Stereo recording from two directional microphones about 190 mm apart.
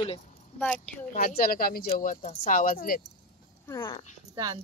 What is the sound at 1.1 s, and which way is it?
Speech, 50° left (ahead or behind).